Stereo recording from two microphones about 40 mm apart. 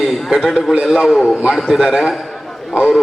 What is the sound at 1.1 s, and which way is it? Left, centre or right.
A man's voice, centre.